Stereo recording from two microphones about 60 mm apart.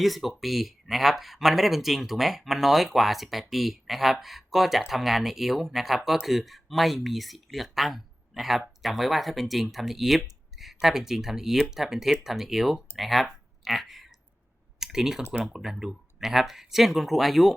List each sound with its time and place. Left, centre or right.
0.0 s speech: centre
14.8 s typing: centre
15.2 s speech: centre
15.4 s speech: centre